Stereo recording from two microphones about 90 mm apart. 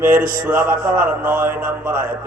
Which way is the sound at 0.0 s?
20° right (ahead or behind).